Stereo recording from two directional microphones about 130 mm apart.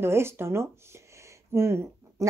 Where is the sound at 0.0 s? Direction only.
20° right (ahead or behind).